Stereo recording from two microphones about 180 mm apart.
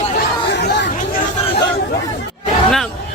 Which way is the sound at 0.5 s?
70° left (ahead or behind).